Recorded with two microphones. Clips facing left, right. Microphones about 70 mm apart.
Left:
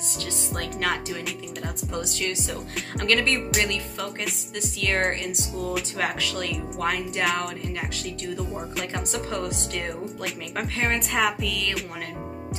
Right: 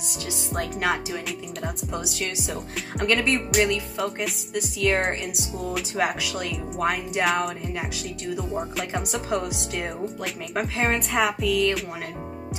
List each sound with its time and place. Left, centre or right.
0.6 s speech: centre